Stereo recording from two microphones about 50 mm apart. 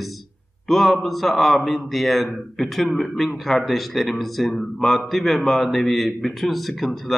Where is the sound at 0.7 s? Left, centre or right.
Centre.